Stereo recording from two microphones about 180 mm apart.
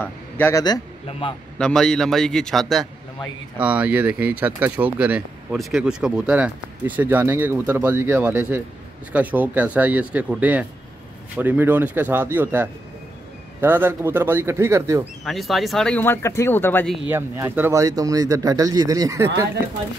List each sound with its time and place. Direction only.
0.0 s a man's voice: 15° left (ahead or behind)
1.6 s a man's voice: 5° left (ahead or behind); by 15.0 s 15° right (ahead or behind)
15.2 s speech: centre (ahead or behind)
17.1 s speech: 15° right (ahead or behind)